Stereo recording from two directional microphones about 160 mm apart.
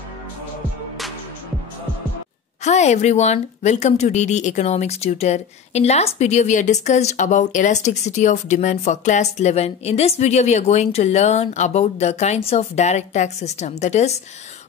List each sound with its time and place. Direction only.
2.6 s a woman's voice: 45° left (ahead or behind)